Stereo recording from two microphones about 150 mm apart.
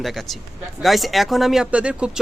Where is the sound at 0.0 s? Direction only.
Centre (ahead or behind).